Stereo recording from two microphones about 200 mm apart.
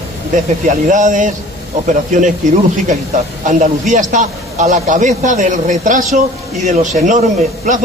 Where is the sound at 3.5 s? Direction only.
40° right (ahead or behind).